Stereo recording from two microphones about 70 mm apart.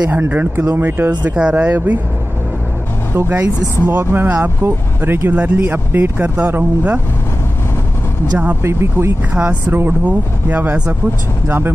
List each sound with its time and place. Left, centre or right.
0.1 s speech: right
1.2 s speech: centre
1.5 s speech: right
3.2 s speech: right
8.6 s speech: right
9.4 s speech: right